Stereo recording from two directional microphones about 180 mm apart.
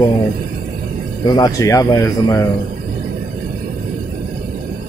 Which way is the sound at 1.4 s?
20° left (ahead or behind).